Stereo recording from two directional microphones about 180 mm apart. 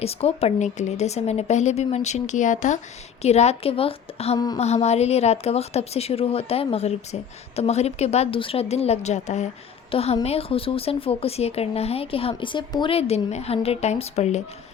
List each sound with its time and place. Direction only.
0.0 s speech: 35° left (ahead or behind)
4.4 s a sound: 20° left (ahead or behind)
4.6 s speech: 35° left (ahead or behind)